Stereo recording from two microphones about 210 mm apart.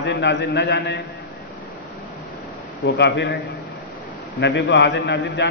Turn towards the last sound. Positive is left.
turn(degrees=55)  # may be behind; listen again after turning